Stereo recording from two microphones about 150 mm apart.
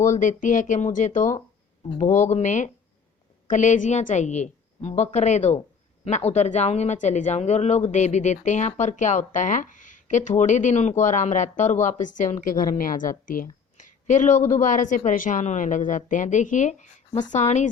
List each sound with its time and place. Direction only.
0.0 s a woman's voice: 55° left (ahead or behind)